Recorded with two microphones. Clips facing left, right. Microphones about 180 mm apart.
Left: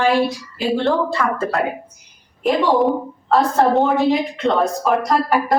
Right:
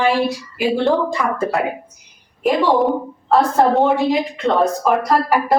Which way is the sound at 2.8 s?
Centre (ahead or behind).